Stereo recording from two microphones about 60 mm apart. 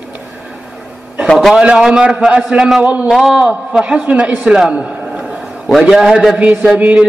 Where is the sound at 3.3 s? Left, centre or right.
Centre.